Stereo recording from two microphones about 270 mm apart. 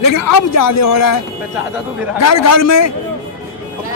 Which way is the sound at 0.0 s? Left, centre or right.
Left.